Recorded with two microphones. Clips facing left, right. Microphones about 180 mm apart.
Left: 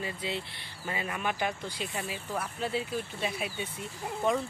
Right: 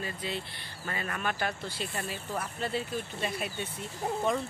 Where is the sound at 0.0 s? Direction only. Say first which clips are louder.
Left 1 dB; 20° left (ahead or behind).